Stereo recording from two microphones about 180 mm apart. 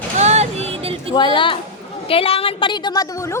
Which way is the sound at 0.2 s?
40° right (ahead or behind).